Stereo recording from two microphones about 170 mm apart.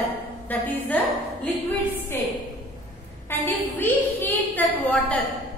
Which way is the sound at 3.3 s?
10° left (ahead or behind).